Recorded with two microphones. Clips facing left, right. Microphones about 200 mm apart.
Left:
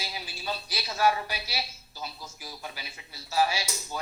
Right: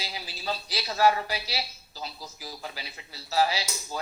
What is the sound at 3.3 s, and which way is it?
Speech, 30° right (ahead or behind).